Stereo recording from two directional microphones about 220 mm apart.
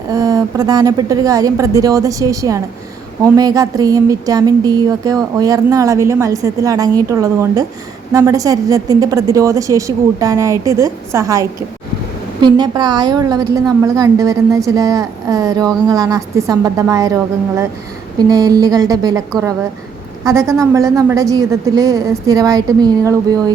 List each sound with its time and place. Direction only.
0.1 s a woman's voice: 15° right (ahead or behind)
18.2 s a woman's voice: 15° right (ahead or behind)
20.2 s a woman's voice: 15° right (ahead or behind)